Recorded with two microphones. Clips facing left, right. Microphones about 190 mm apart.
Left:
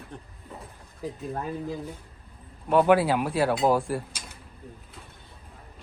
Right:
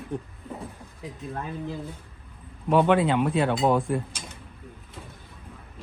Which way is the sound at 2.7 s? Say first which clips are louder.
Even; 5° left (ahead or behind).